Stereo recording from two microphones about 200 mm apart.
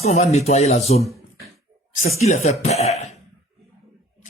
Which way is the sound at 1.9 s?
35° left (ahead or behind).